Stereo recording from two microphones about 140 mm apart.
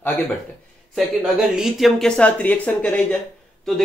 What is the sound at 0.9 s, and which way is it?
Speech, centre (ahead or behind).